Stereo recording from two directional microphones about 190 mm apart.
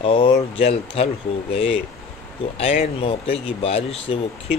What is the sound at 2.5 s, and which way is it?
Speech, 35° left (ahead or behind).